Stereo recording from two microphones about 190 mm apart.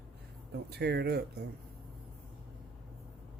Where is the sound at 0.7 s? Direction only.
60° right (ahead or behind).